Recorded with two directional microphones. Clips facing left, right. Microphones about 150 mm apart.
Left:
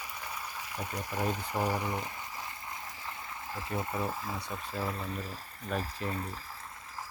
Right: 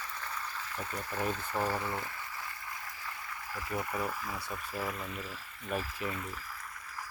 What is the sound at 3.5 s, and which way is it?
Speech, 25° left (ahead or behind).